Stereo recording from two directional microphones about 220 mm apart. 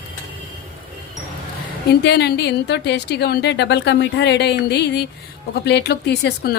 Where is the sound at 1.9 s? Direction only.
50° left (ahead or behind).